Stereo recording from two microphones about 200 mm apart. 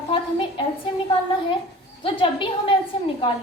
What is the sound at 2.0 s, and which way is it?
Speech, 25° left (ahead or behind).